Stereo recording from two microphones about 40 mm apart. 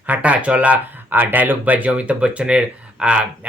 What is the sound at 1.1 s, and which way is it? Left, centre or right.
Speech, right.